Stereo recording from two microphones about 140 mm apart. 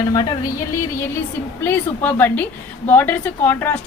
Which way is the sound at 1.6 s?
15° left (ahead or behind).